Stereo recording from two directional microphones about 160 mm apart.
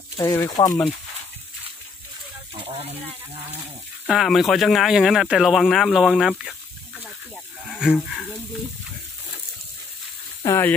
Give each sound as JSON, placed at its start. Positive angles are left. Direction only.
{"t": 0.2, "sound": "speech", "side_deg": 15}
{"t": 2.6, "sound": "a sound", "side_deg": -35}
{"t": 4.1, "sound": "speech", "side_deg": 0}
{"t": 7.7, "sound": "speech", "side_deg": -5}
{"t": 10.4, "sound": "speech", "side_deg": 15}